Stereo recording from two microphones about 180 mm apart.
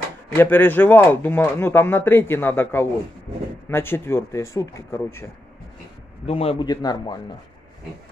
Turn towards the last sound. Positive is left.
turn(degrees=20)  # may be behind; listen again after turning